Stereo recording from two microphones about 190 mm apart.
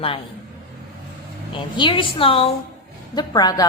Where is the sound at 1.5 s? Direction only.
25° left (ahead or behind).